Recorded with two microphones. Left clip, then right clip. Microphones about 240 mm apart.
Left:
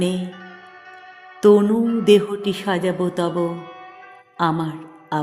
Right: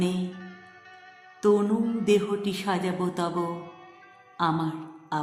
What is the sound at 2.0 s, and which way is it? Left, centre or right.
A man's voice, left.